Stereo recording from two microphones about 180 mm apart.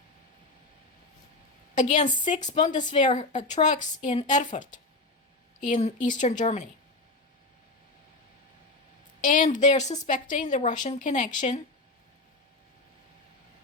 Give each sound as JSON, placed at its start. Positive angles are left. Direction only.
{"t": 1.7, "sound": "a woman's voice", "side_deg": 45}
{"t": 9.2, "sound": "a woman's voice", "side_deg": 45}